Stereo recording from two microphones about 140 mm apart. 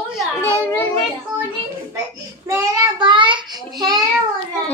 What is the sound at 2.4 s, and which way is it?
A child's voice, 25° right (ahead or behind).